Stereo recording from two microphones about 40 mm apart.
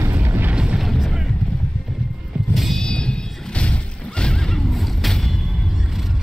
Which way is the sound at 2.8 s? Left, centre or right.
Left.